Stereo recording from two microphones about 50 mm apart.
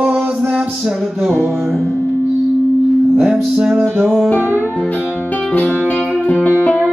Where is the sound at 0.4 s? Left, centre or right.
Centre.